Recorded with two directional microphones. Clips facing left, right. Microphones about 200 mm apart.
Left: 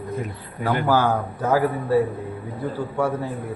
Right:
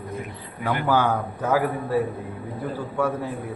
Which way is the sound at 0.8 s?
10° left (ahead or behind).